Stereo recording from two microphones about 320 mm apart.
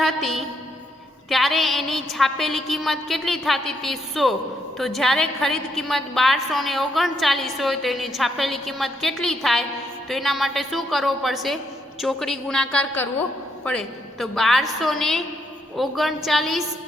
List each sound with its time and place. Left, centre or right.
0.0 s a woman's voice: centre